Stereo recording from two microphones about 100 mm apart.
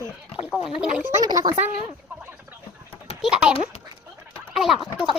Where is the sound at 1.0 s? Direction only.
25° right (ahead or behind).